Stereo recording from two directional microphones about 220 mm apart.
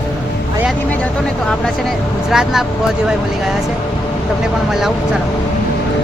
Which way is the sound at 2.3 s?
Centre (ahead or behind).